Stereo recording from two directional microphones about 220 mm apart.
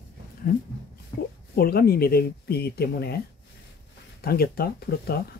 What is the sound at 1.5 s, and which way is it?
Speech, 45° left (ahead or behind).